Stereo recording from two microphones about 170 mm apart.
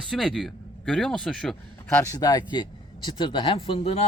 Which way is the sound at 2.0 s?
20° left (ahead or behind).